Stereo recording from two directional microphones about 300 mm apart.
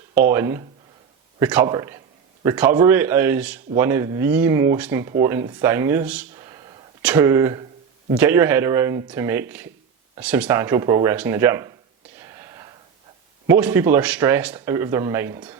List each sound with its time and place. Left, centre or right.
0.1 s speech: centre
12.2 s a sound: centre
13.5 s speech: centre